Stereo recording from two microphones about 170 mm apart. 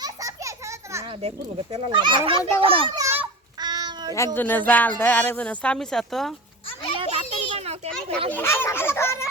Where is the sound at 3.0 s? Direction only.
15° right (ahead or behind).